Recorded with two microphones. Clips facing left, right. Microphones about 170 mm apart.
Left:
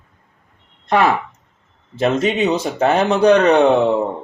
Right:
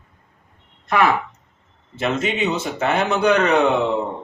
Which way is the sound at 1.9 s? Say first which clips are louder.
Left 5 dB; 35° left (ahead or behind).